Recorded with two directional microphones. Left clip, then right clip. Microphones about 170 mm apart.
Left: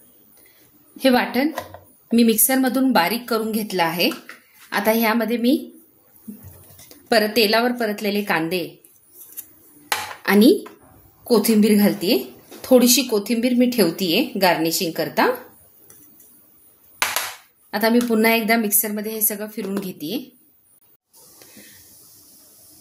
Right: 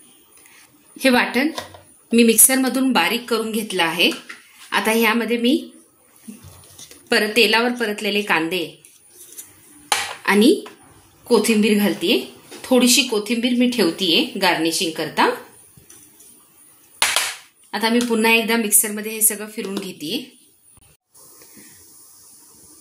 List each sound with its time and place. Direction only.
0.9 s a woman's voice: 30° left (ahead or behind)
7.1 s a woman's voice: 35° left (ahead or behind)
10.2 s a woman's voice: 40° left (ahead or behind)
17.6 s a woman's voice: 45° left (ahead or behind)